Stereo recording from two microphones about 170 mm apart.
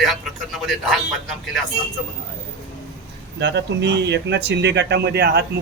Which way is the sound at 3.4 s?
90° right.